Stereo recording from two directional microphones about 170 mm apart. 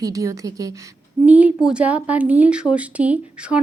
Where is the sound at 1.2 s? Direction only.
10° right (ahead or behind).